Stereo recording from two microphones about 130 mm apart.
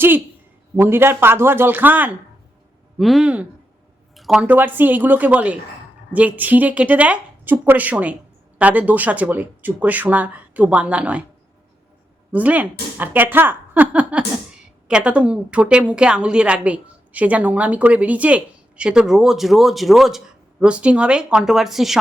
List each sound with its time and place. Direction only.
0.8 s a woman's voice: 15° right (ahead or behind)
3.0 s a woman's voice: centre (ahead or behind)
12.3 s a woman's voice: 10° right (ahead or behind)